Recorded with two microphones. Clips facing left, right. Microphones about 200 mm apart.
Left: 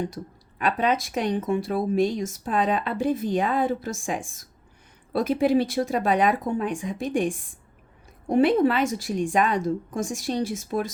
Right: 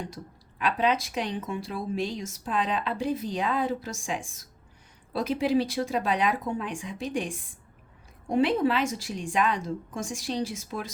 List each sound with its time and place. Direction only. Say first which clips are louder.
0.6 s speech: left 2 dB; 50° left (ahead or behind)